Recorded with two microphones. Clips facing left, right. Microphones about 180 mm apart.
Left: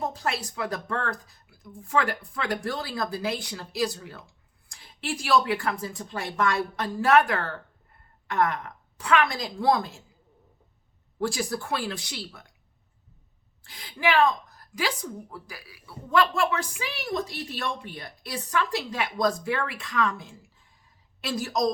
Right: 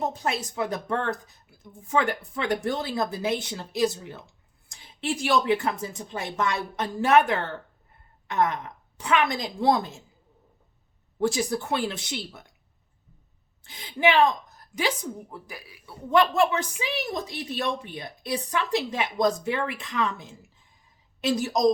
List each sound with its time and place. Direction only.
0.0 s a woman's voice: 20° right (ahead or behind)
11.2 s a woman's voice: 20° right (ahead or behind)
13.7 s a woman's voice: 20° right (ahead or behind)